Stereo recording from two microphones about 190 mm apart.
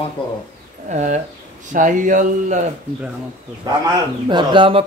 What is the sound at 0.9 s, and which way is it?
Speech, 40° right (ahead or behind).